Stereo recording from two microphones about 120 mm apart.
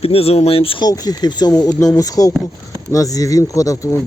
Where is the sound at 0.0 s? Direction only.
55° left (ahead or behind).